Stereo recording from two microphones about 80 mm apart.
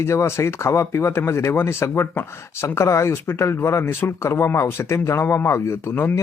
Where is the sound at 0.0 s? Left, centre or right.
Left.